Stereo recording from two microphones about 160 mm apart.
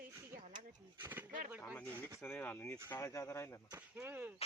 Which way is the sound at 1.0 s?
10° right (ahead or behind).